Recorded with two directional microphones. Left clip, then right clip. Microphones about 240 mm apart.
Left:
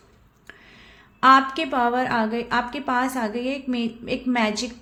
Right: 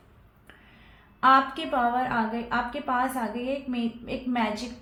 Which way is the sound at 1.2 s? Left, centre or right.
Left.